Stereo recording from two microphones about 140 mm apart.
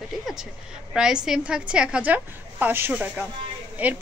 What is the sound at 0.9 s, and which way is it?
A woman's voice, 5° right (ahead or behind).